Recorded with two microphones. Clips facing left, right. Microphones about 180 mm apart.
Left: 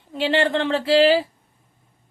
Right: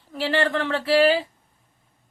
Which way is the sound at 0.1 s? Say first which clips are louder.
Left 3 dB; 25° left (ahead or behind).